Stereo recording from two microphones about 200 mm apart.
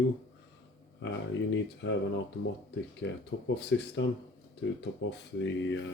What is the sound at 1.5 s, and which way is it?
Speech, 65° left (ahead or behind).